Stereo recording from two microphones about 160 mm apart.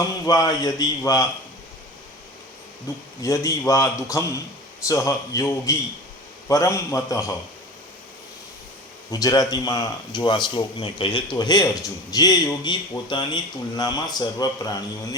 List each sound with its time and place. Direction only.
0.3 s speech: 25° left (ahead or behind)
3.2 s speech: 20° left (ahead or behind)
9.0 s speech: 20° left (ahead or behind)